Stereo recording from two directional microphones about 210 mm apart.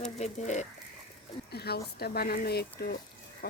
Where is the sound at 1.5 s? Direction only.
50° left (ahead or behind).